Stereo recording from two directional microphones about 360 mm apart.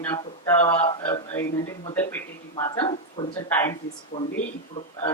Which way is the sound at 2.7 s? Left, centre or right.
Centre.